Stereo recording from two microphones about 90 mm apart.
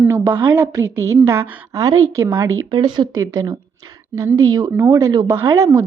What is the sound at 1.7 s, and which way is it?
Speech, 40° right (ahead or behind).